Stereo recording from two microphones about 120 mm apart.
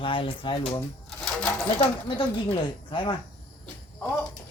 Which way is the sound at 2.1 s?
45° left (ahead or behind).